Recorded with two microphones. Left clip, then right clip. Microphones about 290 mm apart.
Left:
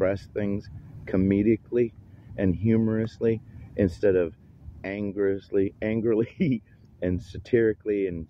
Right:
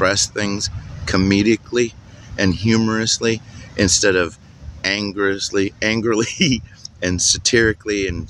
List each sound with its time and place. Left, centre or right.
0.0 s speech: left